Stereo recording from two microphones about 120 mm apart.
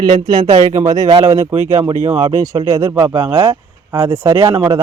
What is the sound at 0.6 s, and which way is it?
Speech, 70° right (ahead or behind).